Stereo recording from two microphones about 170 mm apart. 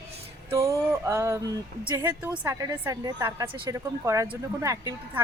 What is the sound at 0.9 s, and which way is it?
A woman's voice, 15° right (ahead or behind).